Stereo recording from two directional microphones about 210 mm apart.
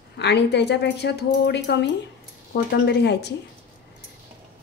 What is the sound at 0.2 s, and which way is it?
Speech, 55° left (ahead or behind).